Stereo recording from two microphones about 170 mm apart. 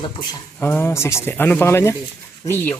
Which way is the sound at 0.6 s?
10° left (ahead or behind).